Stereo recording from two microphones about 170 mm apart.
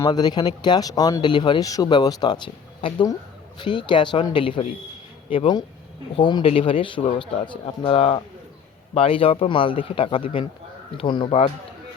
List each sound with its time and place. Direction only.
0.0 s speech: 25° left (ahead or behind)